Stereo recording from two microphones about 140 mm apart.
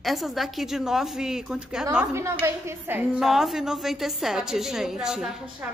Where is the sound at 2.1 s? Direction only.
20° right (ahead or behind).